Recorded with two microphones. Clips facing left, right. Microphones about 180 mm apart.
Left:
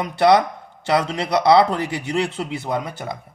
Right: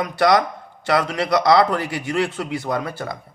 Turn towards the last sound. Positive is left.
turn(degrees=20)  # may be behind; listen again after turning